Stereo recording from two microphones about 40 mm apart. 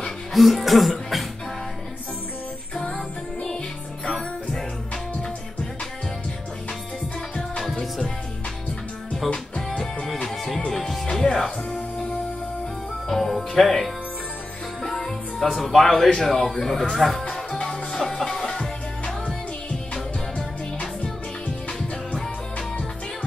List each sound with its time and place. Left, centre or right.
0.3 s speech: centre
4.1 s music: centre
9.7 s music: centre
13.1 s music: centre
15.5 s speech: centre
15.9 s speech: centre
17.2 s music: left
21.7 s music: centre